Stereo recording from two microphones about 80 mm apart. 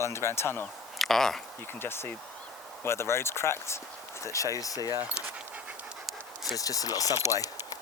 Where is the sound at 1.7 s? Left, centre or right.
Left.